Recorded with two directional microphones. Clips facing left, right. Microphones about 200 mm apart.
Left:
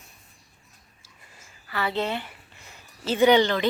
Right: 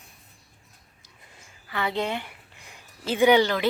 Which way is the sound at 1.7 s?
15° right (ahead or behind).